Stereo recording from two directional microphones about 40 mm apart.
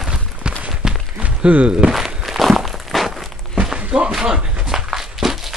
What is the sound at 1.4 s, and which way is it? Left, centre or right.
Thunk, right.